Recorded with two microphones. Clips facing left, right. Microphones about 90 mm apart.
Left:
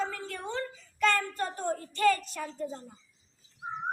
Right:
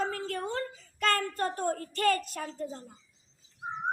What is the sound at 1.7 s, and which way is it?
Child singing, 50° right (ahead or behind).